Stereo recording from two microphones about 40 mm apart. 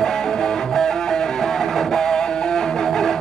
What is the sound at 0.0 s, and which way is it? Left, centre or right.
Music, centre.